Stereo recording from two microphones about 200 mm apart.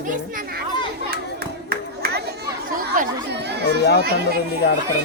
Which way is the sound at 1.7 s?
50° right (ahead or behind).